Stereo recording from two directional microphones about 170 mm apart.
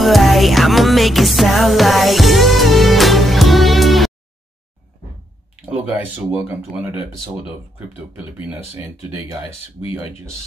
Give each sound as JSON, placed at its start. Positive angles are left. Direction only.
{"t": 0.0, "sound": "music", "side_deg": 0}
{"t": 5.7, "sound": "speech", "side_deg": -10}
{"t": 8.5, "sound": "speech", "side_deg": -5}